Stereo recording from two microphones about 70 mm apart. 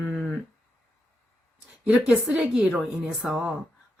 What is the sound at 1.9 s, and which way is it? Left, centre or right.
Speech, centre.